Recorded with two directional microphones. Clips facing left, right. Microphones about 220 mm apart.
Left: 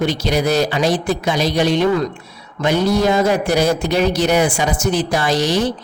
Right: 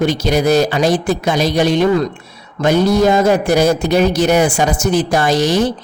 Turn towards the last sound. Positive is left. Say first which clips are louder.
# right 3 dB
turn(degrees=-45)  # may be behind; listen again after turning